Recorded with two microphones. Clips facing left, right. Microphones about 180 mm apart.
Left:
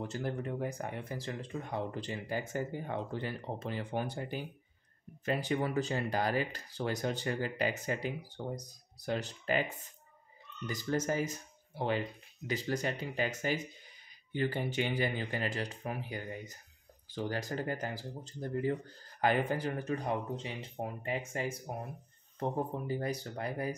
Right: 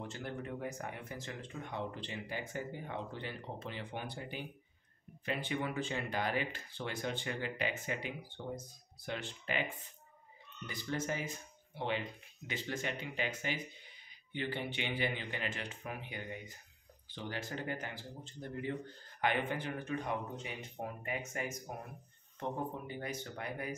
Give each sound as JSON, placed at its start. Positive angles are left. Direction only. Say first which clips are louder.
{"t": 0.1, "sound": "speech", "louder": "left 5 dB", "side_deg": 35}
{"t": 10.7, "sound": "speech", "louder": "left 5 dB", "side_deg": 40}